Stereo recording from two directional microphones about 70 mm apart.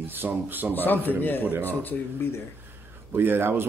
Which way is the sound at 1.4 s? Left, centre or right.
Right.